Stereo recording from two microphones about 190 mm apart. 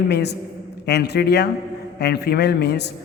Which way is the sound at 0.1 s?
60° left (ahead or behind).